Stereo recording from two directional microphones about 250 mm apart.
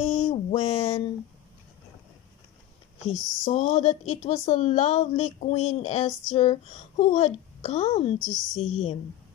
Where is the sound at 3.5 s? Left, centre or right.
Left.